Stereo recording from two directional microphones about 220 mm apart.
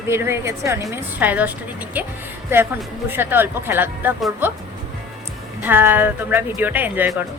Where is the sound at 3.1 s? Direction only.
10° right (ahead or behind).